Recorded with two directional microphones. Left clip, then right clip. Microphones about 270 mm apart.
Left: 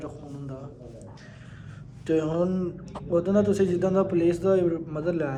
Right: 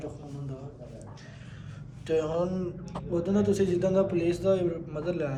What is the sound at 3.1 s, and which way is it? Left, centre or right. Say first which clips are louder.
Speech: left 4 dB; centre.